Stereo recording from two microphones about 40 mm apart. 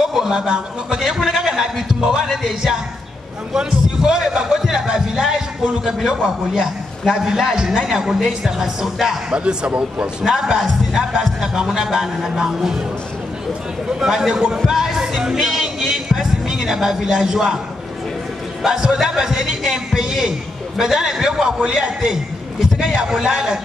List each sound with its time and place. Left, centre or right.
0.0 s speech: centre
0.9 s a man's voice: centre
9.3 s speech: right
10.2 s speech: centre
13.8 s speech: centre
14.7 s music: centre
18.7 s speech: centre